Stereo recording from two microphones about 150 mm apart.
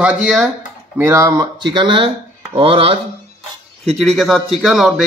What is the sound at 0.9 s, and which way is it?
Speech, 15° right (ahead or behind).